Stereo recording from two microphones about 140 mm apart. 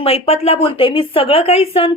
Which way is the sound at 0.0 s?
45° left (ahead or behind).